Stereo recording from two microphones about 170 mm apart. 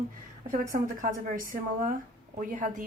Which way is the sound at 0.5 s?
50° right (ahead or behind).